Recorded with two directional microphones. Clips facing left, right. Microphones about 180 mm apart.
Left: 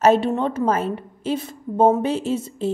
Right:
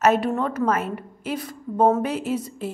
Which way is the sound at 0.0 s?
30° left (ahead or behind).